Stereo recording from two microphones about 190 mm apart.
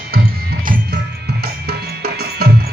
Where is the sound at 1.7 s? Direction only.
55° right (ahead or behind).